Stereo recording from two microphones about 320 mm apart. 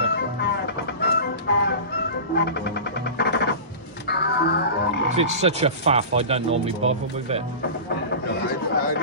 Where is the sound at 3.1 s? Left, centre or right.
Left.